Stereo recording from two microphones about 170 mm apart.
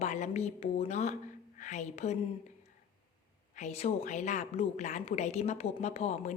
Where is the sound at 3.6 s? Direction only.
40° left (ahead or behind).